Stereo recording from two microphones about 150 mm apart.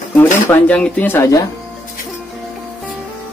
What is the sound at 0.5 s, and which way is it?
Speech, 10° left (ahead or behind).